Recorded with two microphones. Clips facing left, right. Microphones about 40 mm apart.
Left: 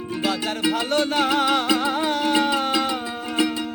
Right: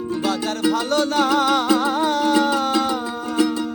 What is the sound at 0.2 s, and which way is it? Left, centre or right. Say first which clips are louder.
Music: right 1 dB; left.